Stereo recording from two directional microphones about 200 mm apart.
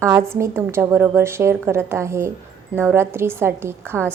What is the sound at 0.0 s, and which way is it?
Speech, 10° right (ahead or behind).